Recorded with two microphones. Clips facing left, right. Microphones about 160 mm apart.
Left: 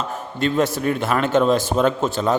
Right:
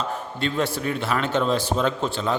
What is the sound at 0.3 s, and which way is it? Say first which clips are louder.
A man's voice: left 6 dB; 45° left (ahead or behind).